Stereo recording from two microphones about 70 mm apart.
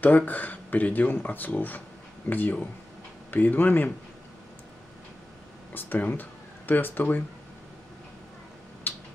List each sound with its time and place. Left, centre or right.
0.0 s speech: left
5.7 s speech: left
8.9 s a sound: left